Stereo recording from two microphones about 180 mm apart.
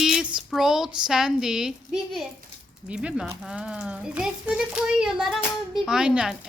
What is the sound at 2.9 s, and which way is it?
Speech, 5° right (ahead or behind).